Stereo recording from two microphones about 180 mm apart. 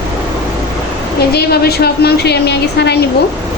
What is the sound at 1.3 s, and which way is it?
A woman's voice, 60° left (ahead or behind).